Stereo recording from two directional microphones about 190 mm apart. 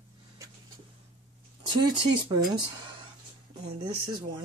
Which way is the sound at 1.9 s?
25° right (ahead or behind).